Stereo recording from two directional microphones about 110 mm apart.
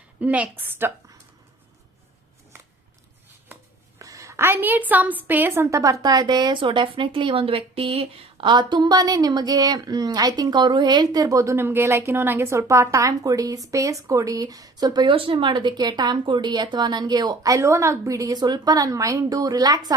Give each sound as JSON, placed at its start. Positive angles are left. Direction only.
{"t": 0.2, "sound": "a woman's voice", "side_deg": -15}
{"t": 3.9, "sound": "a woman's voice", "side_deg": -30}